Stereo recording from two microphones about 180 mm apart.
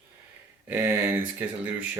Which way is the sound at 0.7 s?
10° right (ahead or behind).